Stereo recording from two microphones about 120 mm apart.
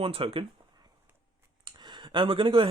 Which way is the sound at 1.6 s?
40° right (ahead or behind).